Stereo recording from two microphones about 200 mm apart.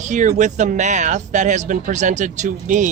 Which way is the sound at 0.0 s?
35° right (ahead or behind).